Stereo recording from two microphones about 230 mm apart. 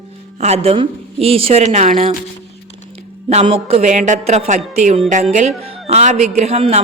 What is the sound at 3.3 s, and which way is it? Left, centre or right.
Speech, right.